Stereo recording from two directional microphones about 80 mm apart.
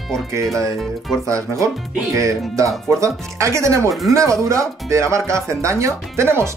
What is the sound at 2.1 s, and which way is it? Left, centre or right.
Speech, right.